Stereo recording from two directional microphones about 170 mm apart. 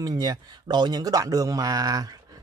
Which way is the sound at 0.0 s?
25° right (ahead or behind).